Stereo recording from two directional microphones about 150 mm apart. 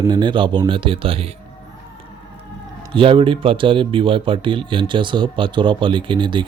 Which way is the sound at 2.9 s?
35° right (ahead or behind).